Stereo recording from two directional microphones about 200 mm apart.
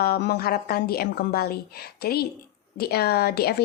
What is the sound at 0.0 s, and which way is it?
A woman's voice, 55° left (ahead or behind).